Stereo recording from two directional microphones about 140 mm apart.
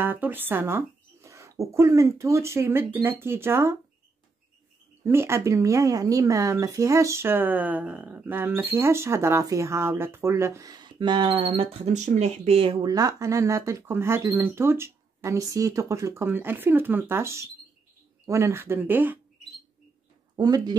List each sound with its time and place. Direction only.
0.0 s speech: 15° right (ahead or behind)
5.0 s speech: 15° right (ahead or behind); by 12.9 s 40° right (ahead or behind)
12.9 s speech: 25° right (ahead or behind)
20.3 s speech: 30° right (ahead or behind)